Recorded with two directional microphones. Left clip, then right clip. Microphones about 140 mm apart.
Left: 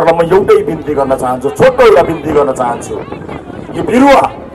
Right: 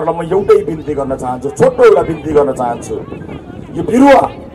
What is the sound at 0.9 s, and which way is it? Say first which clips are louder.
A man's voice: left 8 dB; 35° left (ahead or behind).